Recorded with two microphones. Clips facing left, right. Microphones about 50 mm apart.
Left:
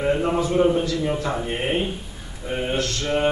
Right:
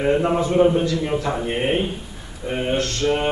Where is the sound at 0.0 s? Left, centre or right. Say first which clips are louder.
Right 2 dB; centre.